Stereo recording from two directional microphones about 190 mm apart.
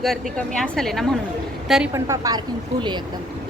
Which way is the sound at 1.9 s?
15° right (ahead or behind).